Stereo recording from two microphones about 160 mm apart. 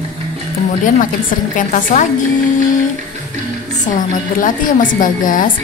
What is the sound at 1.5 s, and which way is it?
Speech, 55° left (ahead or behind).